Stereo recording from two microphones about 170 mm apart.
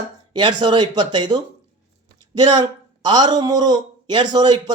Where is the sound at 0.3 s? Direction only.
30° right (ahead or behind).